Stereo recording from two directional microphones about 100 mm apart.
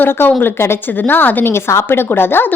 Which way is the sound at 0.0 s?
20° left (ahead or behind).